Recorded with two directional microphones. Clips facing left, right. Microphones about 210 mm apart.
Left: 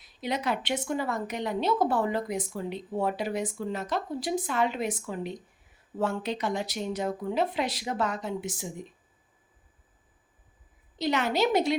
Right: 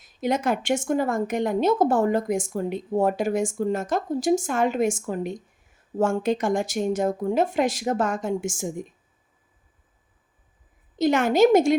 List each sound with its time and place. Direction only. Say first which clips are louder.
0.0 s speech: right 7 dB; 45° right (ahead or behind)
10.9 s speech: right 7 dB; 50° right (ahead or behind)